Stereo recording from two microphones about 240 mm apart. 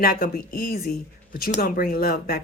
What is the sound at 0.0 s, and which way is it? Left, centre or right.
Speech, left.